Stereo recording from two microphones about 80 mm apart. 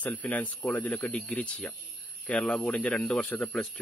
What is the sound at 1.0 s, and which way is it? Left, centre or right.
Speech, centre.